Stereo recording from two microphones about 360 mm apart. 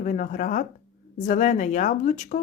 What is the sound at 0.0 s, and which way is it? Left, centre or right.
Speech, left.